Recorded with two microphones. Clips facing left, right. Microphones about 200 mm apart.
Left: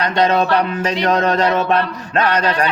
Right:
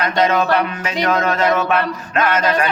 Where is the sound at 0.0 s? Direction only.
35° left (ahead or behind).